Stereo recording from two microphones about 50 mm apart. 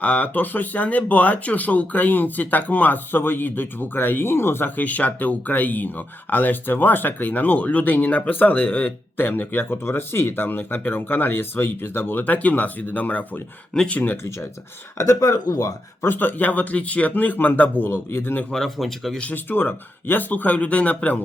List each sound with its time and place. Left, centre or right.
0.0 s speech: left
4.8 s speech: left
12.2 s speech: left
16.0 s speech: left
18.5 s speech: centre
19.2 s speech: left